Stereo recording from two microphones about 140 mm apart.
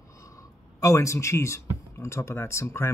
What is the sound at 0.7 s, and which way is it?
Speech, 20° left (ahead or behind).